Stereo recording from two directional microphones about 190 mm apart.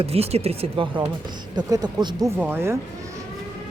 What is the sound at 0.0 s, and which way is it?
Speech, 30° right (ahead or behind).